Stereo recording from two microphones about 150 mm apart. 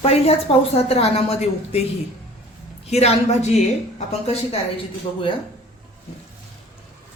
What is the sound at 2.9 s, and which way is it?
Speech, 45° left (ahead or behind).